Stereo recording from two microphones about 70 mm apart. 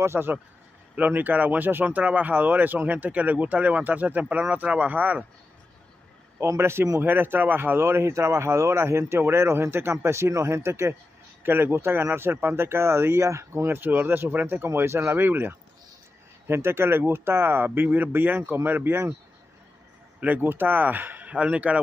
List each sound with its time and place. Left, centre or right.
0.0 s a man's voice: right
6.4 s a man's voice: right
20.2 s speech: right